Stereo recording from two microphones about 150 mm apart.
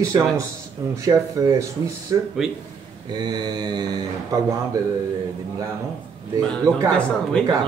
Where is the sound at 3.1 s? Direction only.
30° right (ahead or behind).